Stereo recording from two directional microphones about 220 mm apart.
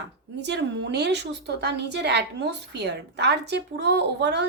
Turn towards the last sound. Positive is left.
turn(degrees=-50)  # may be behind; listen again after turning